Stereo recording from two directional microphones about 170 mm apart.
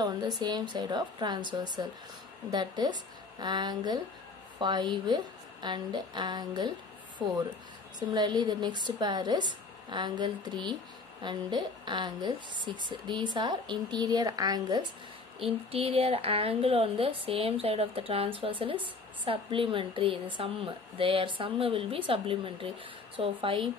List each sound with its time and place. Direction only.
0.4 s a woman's voice: 25° right (ahead or behind)
7.2 s speech: centre (ahead or behind)
8.1 s a woman's voice: 25° right (ahead or behind)
15.3 s a woman's voice: 35° right (ahead or behind)